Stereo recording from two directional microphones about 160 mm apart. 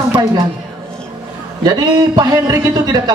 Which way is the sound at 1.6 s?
25° right (ahead or behind).